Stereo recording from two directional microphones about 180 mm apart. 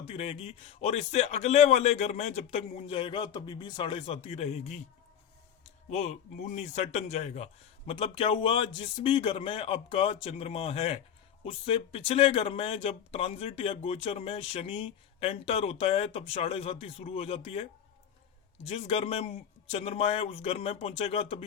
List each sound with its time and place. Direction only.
0.1 s speech: 30° left (ahead or behind)